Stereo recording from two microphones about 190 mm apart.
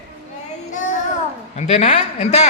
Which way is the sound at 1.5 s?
35° left (ahead or behind).